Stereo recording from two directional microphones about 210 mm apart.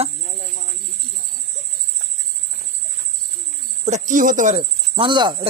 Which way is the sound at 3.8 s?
35° right (ahead or behind).